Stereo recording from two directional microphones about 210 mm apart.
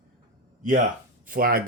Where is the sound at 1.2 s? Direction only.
45° right (ahead or behind).